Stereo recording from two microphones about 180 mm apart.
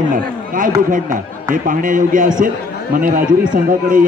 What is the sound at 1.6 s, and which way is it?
A man's voice, 50° right (ahead or behind).